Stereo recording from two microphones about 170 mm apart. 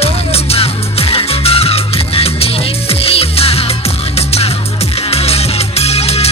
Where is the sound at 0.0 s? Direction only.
35° left (ahead or behind).